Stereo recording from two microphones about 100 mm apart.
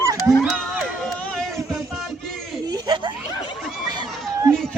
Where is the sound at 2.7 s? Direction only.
45° right (ahead or behind).